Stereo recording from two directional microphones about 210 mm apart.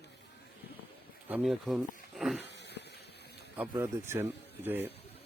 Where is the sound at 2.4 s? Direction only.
55° left (ahead or behind).